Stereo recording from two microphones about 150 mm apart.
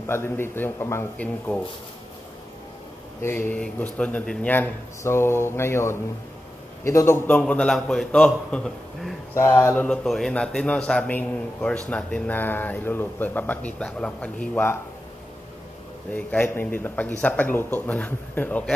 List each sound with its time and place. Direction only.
0.0 s speech: 15° left (ahead or behind)
3.2 s speech: 10° left (ahead or behind)
9.3 s speech: 20° left (ahead or behind)
9.8 s a man's voice: centre (ahead or behind)
16.1 s speech: 10° left (ahead or behind)